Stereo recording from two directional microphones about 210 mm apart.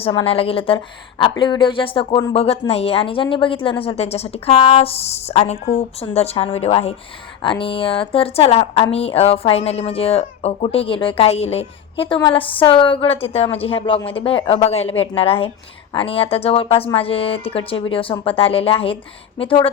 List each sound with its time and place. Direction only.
0.0 s speech: 25° left (ahead or behind)